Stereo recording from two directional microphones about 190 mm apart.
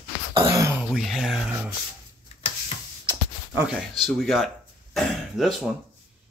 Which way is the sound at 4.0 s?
Centre (ahead or behind).